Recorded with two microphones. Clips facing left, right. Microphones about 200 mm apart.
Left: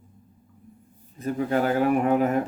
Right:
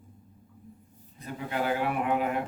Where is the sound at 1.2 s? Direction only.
45° left (ahead or behind).